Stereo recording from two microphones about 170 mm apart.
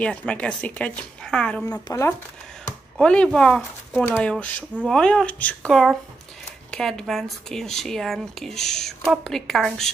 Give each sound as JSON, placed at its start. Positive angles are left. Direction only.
{"t": 0.0, "sound": "a woman's voice", "side_deg": 5}
{"t": 1.7, "sound": "speech", "side_deg": 20}
{"t": 3.0, "sound": "a woman's voice", "side_deg": 5}